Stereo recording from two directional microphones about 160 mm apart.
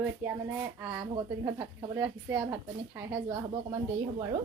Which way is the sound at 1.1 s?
25° right (ahead or behind).